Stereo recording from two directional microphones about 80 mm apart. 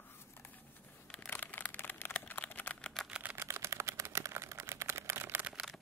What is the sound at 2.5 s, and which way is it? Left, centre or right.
Typing, left.